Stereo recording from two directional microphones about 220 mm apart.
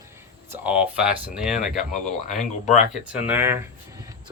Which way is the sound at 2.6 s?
35° left (ahead or behind).